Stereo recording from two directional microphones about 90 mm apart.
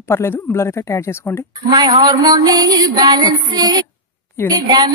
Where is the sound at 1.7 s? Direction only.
45° right (ahead or behind).